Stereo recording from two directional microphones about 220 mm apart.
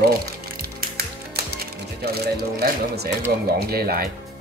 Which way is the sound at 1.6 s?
45° right (ahead or behind).